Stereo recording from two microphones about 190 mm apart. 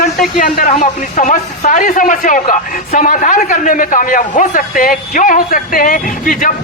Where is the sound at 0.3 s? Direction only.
45° left (ahead or behind).